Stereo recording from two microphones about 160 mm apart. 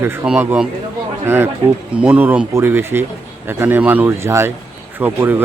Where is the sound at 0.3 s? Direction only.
5° right (ahead or behind).